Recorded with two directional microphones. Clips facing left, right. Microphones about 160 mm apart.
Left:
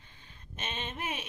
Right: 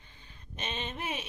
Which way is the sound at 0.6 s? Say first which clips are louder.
Right 1 dB; 5° left (ahead or behind).